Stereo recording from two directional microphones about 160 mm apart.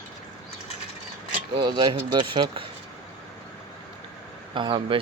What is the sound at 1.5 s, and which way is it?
Speech, 30° right (ahead or behind).